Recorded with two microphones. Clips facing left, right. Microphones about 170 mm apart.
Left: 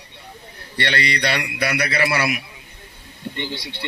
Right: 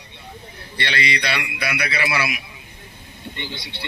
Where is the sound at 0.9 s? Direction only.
45° left (ahead or behind).